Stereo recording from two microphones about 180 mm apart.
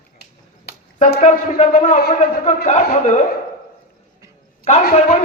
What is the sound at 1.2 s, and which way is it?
A man's voice, 40° left (ahead or behind).